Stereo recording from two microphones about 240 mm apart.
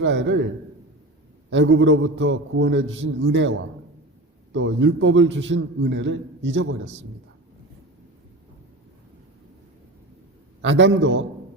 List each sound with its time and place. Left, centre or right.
0.0 s a man's voice: right
1.5 s a man's voice: right
4.5 s a man's voice: right
10.6 s a man's voice: right